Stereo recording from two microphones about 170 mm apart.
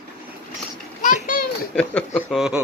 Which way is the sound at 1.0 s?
50° left (ahead or behind).